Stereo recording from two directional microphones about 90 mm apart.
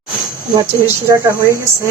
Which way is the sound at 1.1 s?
30° right (ahead or behind).